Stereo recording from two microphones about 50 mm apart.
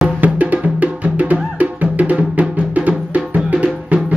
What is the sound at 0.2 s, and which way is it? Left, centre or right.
Music, right.